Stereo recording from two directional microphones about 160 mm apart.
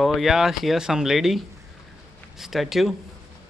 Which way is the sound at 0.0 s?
Centre (ahead or behind).